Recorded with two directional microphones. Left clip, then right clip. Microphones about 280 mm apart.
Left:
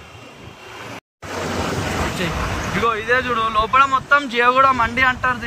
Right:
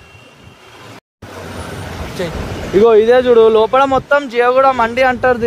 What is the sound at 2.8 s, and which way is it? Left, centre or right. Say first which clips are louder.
Speech: right 10 dB; right.